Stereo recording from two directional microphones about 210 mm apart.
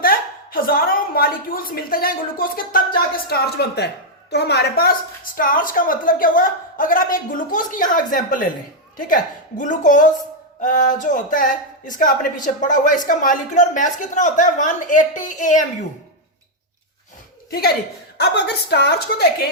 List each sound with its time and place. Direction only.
0.0 s a sound: 45° left (ahead or behind)
3.2 s a woman's voice: 50° left (ahead or behind)
18.2 s a woman's voice: 50° left (ahead or behind)